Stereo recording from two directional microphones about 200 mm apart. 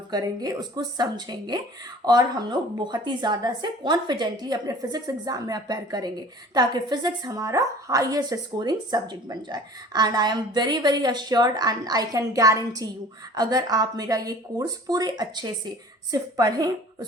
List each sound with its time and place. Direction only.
0.1 s speech: 20° right (ahead or behind)